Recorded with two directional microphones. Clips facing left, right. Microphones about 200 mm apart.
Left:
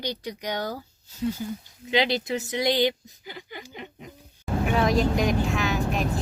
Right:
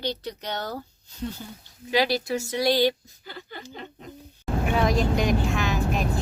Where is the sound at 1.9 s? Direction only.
20° left (ahead or behind).